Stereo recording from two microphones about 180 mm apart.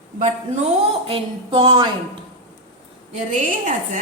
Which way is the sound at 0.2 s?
40° right (ahead or behind).